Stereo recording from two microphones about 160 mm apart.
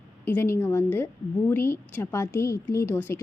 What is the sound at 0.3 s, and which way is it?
A woman's voice, 15° left (ahead or behind).